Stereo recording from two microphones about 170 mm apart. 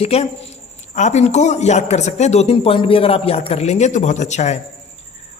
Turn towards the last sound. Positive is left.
turn(degrees=45)  # may be behind; listen again after turning